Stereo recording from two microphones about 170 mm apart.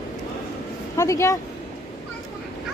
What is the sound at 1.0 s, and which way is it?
Speech, 20° left (ahead or behind).